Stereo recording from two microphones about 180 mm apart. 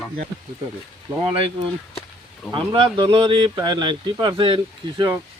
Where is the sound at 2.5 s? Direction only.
30° right (ahead or behind).